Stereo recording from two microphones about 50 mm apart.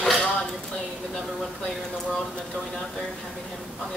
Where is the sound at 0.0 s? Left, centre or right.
Centre.